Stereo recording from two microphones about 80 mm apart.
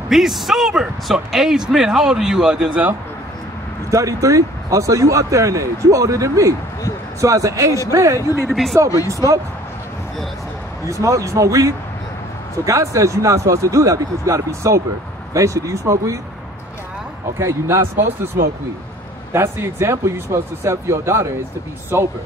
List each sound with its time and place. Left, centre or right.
0.1 s speech: centre
3.9 s speech: right
8.4 s speech: centre
9.0 s speech: right
10.9 s speech: right
17.4 s speech: right
19.3 s speech: right